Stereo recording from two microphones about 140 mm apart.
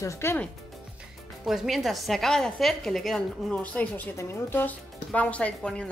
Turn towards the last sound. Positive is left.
turn(degrees=5)  # may be behind; listen again after turning